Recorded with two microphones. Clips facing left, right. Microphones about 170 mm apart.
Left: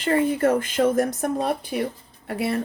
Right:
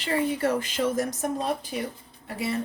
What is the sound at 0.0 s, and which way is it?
Speech, 50° left (ahead or behind).